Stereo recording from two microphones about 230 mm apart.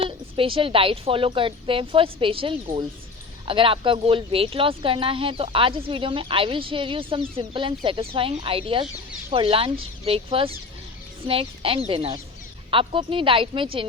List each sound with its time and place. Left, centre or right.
0.0 s speech: right